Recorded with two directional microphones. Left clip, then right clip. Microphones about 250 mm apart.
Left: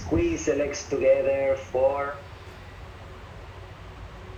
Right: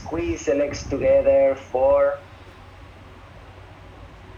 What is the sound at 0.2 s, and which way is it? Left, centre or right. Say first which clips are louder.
Speech: right 5 dB; centre.